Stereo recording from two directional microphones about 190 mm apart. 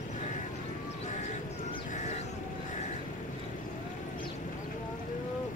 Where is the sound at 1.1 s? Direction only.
40° left (ahead or behind).